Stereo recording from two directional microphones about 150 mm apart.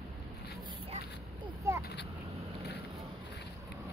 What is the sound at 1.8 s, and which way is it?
Vehicle, 90° left.